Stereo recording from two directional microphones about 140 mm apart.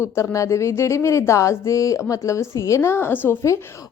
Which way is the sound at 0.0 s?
20° left (ahead or behind).